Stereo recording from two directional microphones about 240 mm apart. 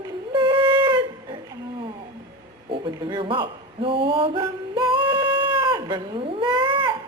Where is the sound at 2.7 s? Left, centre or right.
Centre.